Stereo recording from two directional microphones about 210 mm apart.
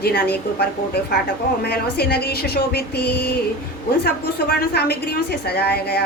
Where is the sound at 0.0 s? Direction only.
50° left (ahead or behind).